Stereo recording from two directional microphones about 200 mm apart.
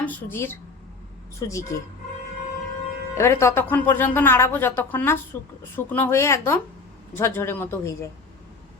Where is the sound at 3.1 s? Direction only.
15° left (ahead or behind).